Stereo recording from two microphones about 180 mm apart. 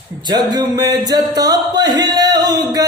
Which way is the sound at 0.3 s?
25° right (ahead or behind).